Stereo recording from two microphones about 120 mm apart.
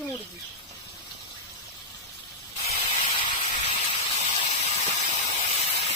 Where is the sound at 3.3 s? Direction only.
90° left.